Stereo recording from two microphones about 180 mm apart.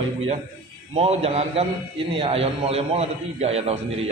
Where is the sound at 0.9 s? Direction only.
35° right (ahead or behind).